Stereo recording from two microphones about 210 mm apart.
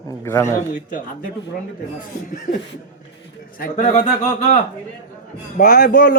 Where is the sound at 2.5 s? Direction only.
35° left (ahead or behind).